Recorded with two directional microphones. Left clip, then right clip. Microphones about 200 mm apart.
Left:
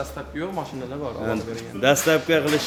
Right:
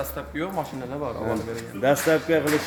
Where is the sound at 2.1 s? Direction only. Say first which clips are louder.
Left 2 dB; 5° left (ahead or behind).